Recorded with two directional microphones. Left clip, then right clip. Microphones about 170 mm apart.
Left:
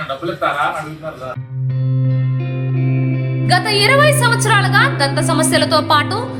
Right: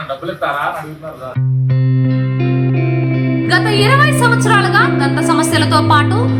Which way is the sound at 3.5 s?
45° left (ahead or behind).